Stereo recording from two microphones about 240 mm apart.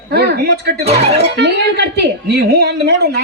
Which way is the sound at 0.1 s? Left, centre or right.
Right.